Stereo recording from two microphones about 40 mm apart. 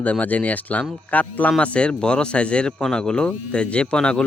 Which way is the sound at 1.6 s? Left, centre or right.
Left.